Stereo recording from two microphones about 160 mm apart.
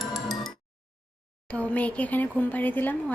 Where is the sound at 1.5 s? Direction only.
10° left (ahead or behind).